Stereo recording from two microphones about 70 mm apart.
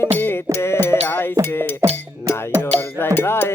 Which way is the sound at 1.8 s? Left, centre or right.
Right.